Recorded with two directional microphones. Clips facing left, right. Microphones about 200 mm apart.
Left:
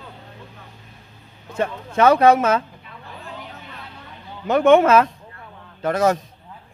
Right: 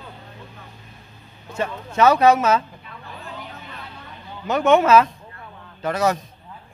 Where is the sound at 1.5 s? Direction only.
55° left (ahead or behind).